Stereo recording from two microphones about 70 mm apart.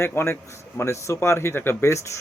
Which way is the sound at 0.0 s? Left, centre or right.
Left.